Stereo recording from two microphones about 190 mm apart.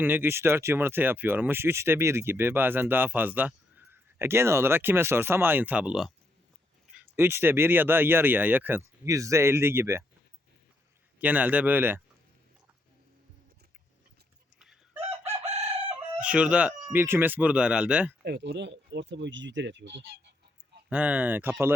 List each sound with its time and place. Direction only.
0.0 s speech: 10° right (ahead or behind)
7.2 s speech: 10° right (ahead or behind)
11.2 s speech: 10° right (ahead or behind)
14.6 s chicken: 5° right (ahead or behind)
15.4 s chicken: 35° right (ahead or behind)
16.2 s speech: 5° right (ahead or behind)
18.2 s speech: 65° right (ahead or behind)
20.9 s speech: 5° right (ahead or behind)